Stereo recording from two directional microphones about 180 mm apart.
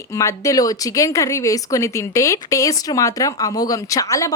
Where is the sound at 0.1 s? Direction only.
15° left (ahead or behind).